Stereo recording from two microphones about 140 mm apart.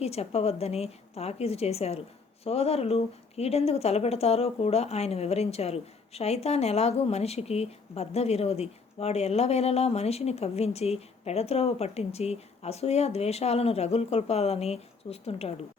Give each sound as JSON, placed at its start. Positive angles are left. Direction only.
{"t": 0.0, "sound": "a woman's voice", "side_deg": 45}